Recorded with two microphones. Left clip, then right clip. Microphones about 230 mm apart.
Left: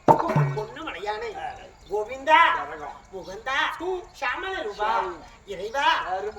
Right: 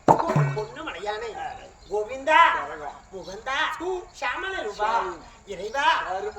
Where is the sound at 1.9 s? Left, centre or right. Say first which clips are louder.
Left 1 dB; centre.